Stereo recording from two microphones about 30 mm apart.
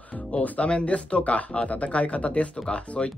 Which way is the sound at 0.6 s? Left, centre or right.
Left.